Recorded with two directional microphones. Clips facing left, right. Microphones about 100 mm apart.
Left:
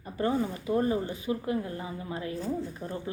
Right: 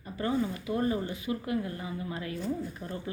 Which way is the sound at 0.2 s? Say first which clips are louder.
Left 2 dB; 30° left (ahead or behind).